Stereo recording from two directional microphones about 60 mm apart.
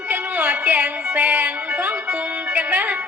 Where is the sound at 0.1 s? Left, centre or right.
Right.